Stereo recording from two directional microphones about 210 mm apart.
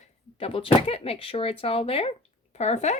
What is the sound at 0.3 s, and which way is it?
A woman's voice, 25° left (ahead or behind).